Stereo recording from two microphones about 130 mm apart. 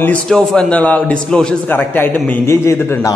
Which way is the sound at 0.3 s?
5° left (ahead or behind).